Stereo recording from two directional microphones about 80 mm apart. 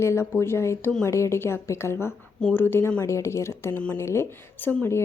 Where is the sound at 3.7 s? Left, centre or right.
Centre.